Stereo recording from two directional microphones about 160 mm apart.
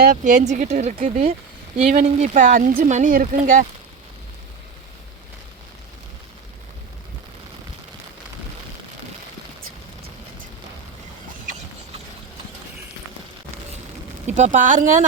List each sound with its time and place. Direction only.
0.0 s speech: 55° right (ahead or behind)
14.3 s speech: 45° right (ahead or behind)